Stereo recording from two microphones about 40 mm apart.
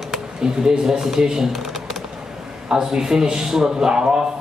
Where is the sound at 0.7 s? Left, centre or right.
Centre.